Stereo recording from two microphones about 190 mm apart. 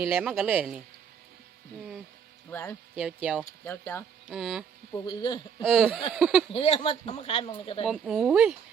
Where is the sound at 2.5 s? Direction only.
15° left (ahead or behind).